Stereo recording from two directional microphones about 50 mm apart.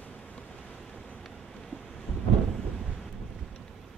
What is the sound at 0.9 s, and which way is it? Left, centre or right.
Vehicle, left.